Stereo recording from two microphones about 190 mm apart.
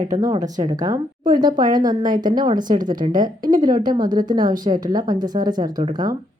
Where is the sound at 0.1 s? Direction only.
20° right (ahead or behind).